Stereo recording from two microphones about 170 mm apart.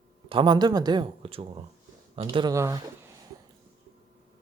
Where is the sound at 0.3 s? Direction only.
30° right (ahead or behind).